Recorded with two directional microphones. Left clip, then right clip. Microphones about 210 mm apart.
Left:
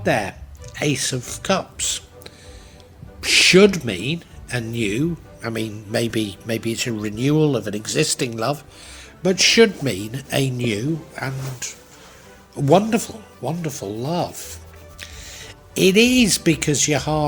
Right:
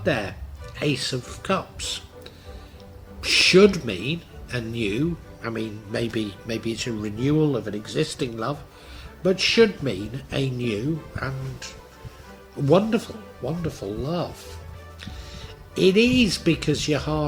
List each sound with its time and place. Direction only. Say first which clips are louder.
0.0 s speech: left 4 dB; 35° left (ahead or behind)